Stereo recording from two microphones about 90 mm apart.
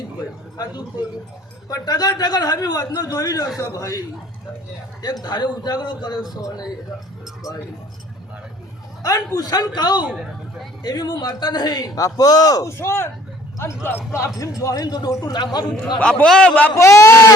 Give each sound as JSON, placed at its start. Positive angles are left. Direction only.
{"t": 0.5, "sound": "a man's voice", "side_deg": 50}
{"t": 5.2, "sound": "a man's voice", "side_deg": 50}
{"t": 9.0, "sound": "a man's voice", "side_deg": 45}
{"t": 14.3, "sound": "a man's voice", "side_deg": 40}
{"t": 16.0, "sound": "speech", "side_deg": 10}
{"t": 16.7, "sound": "speech", "side_deg": 35}